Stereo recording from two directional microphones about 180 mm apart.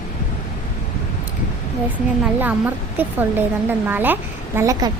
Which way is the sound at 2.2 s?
10° right (ahead or behind).